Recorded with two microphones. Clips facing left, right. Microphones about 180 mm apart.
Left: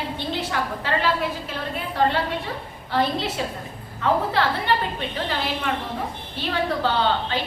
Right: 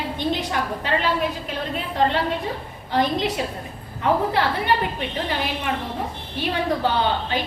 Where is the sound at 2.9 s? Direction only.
15° right (ahead or behind).